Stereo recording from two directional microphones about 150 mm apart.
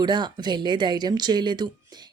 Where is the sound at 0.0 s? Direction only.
30° right (ahead or behind).